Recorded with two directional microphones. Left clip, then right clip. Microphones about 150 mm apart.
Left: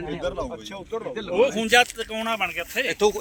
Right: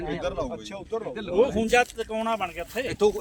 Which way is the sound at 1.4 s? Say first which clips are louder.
Left 3 dB; 90° right.